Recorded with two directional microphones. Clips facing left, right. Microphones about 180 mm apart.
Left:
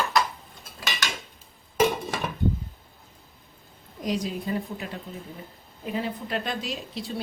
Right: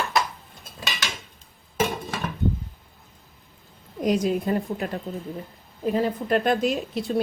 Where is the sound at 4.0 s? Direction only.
55° right (ahead or behind).